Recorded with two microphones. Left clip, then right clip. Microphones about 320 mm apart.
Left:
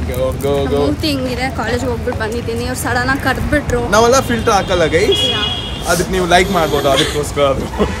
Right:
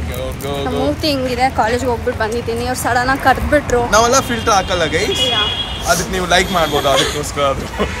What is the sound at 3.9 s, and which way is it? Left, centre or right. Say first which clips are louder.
Speech: left 3 dB; centre.